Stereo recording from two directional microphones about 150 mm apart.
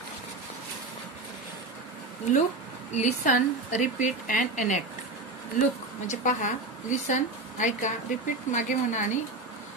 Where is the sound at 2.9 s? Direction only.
50° left (ahead or behind).